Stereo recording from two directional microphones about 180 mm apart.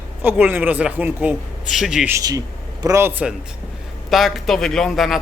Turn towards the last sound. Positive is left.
turn(degrees=0)  # may be behind; listen again after turning